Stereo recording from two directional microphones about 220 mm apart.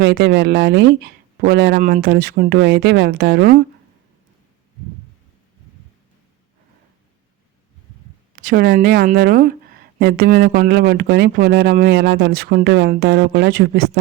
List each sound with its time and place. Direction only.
0.0 s speech: 50° right (ahead or behind)
1.8 s speech: 40° right (ahead or behind)
8.4 s speech: 40° right (ahead or behind)